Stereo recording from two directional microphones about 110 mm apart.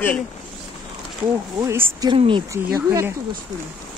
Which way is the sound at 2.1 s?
50° right (ahead or behind).